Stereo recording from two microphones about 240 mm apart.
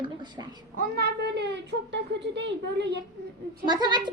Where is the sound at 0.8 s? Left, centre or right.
Right.